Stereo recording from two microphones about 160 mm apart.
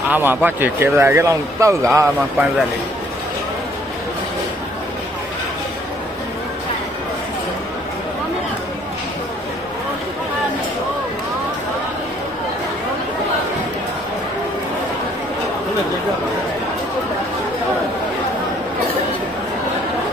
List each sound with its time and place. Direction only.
0.1 s speech: 10° right (ahead or behind)